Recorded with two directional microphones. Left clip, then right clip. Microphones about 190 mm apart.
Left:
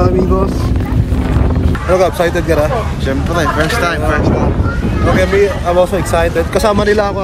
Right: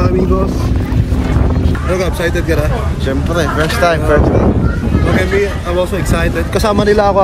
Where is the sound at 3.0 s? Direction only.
20° right (ahead or behind).